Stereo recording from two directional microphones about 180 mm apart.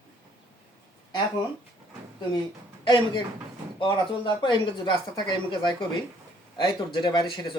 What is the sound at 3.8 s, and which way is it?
Speech, 25° left (ahead or behind).